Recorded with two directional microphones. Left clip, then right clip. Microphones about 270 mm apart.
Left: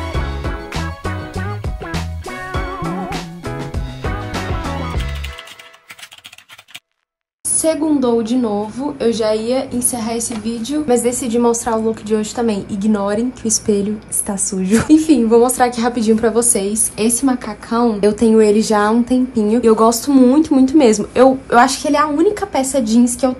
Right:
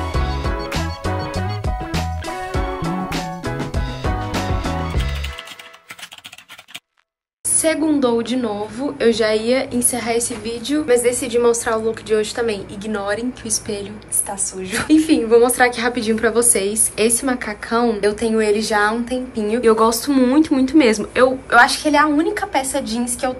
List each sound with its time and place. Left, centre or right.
0.0 s music: centre
7.6 s a woman's voice: centre
14.9 s a woman's voice: centre